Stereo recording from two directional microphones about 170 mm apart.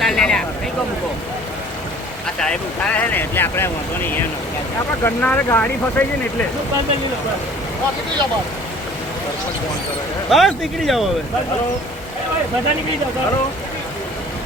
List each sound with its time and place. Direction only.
0.0 s vehicle: 5° left (ahead or behind)
2.2 s speech: 5° left (ahead or behind)
10.2 s speech: centre (ahead or behind)